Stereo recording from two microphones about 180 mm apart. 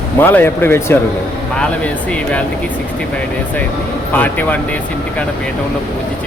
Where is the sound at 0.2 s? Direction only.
10° left (ahead or behind).